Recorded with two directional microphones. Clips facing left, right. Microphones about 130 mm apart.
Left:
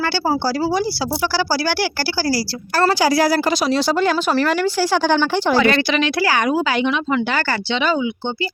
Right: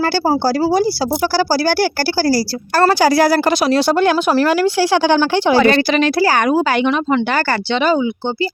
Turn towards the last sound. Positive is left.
turn(degrees=-45)  # may be behind; listen again after turning